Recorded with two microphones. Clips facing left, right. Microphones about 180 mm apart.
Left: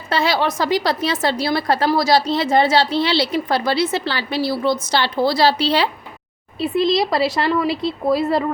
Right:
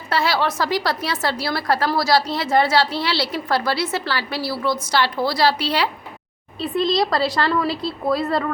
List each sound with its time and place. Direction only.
0.1 s a woman's voice: 20° left (ahead or behind)
6.6 s speech: centre (ahead or behind)